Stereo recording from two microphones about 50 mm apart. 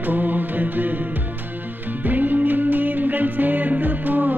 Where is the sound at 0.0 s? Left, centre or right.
Right.